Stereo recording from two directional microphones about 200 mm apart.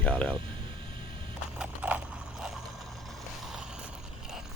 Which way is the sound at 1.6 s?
10° right (ahead or behind).